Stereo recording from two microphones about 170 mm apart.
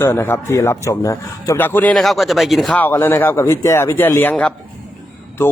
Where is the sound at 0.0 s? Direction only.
10° left (ahead or behind).